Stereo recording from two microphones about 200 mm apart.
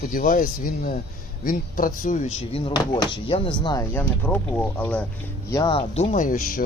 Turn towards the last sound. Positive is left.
turn(degrees=40)  # may be behind; listen again after turning